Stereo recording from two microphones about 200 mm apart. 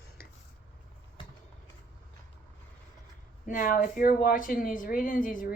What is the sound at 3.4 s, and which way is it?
Speech, 45° left (ahead or behind).